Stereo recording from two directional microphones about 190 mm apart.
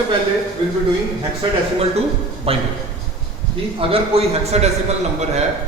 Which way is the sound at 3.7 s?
30° right (ahead or behind).